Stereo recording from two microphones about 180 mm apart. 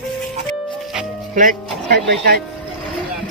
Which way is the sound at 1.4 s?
50° right (ahead or behind).